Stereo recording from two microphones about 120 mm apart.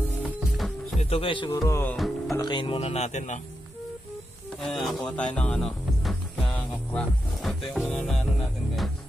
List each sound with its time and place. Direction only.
0.2 s music: centre (ahead or behind)
0.9 s speech: 50° left (ahead or behind)
1.5 s music: 20° left (ahead or behind)
2.0 s music: centre (ahead or behind)
2.3 s speech: 40° left (ahead or behind); by 3.3 s 75° left (ahead or behind)
4.6 s speech: centre (ahead or behind)
5.0 s music: 10° left (ahead or behind)